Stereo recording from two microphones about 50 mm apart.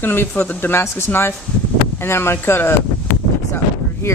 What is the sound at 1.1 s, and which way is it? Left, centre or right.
Speech, left.